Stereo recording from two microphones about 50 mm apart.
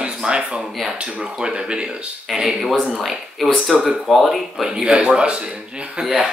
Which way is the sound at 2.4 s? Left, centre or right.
Centre.